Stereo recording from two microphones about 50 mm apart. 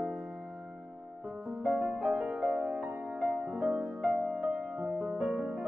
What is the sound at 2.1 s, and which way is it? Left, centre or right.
Music, right.